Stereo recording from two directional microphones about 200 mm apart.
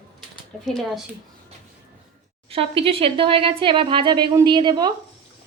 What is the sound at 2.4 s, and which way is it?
A woman's voice, 30° right (ahead or behind).